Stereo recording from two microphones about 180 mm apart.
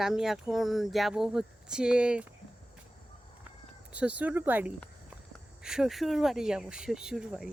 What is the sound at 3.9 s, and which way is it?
Speech, 5° right (ahead or behind).